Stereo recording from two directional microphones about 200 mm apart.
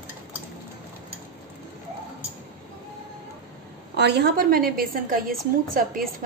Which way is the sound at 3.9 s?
55° right (ahead or behind).